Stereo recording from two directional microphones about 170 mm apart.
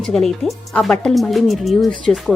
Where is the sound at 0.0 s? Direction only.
Centre (ahead or behind).